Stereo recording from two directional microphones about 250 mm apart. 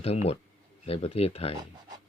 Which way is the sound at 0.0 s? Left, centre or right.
Left.